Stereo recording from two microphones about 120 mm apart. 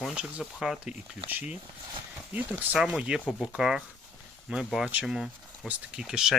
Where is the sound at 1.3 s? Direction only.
15° right (ahead or behind).